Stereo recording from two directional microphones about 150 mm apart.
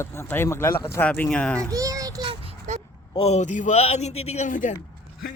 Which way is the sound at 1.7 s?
20° right (ahead or behind).